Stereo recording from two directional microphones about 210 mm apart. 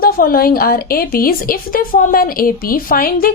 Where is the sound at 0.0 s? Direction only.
45° left (ahead or behind).